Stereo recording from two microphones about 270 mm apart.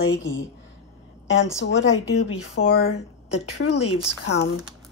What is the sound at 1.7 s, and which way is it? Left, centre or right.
Speech, left.